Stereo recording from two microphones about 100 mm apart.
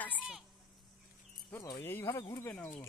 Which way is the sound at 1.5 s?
35° left (ahead or behind).